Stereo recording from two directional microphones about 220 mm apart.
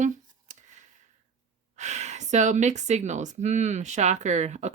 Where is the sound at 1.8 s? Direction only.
30° right (ahead or behind).